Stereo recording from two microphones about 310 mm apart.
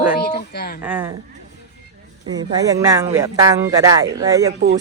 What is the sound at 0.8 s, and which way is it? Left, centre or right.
Speech, centre.